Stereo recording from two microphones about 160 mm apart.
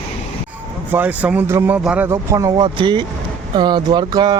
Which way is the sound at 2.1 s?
20° right (ahead or behind).